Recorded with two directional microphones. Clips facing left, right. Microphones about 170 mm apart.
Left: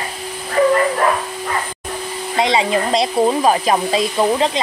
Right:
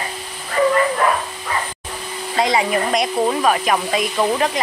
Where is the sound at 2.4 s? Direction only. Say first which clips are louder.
Left 1 dB; 20° left (ahead or behind).